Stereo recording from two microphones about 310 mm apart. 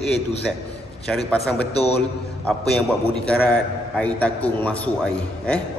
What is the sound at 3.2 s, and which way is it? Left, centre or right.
A man's voice, centre.